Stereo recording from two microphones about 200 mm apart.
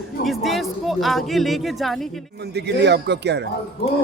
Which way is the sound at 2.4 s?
55° right (ahead or behind).